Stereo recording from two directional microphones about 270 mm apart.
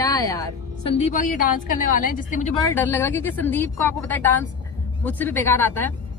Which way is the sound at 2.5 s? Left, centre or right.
Centre.